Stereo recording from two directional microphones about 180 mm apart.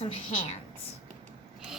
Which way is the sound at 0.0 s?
35° left (ahead or behind).